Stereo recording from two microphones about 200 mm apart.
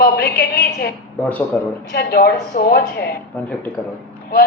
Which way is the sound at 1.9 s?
50° left (ahead or behind).